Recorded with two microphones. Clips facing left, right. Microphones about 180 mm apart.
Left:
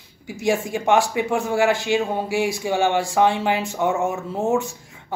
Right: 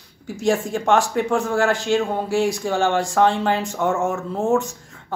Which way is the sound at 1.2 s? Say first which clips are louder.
Right 2 dB; 20° left (ahead or behind).